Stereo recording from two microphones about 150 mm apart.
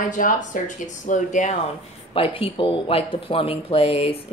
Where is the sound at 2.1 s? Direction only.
40° left (ahead or behind).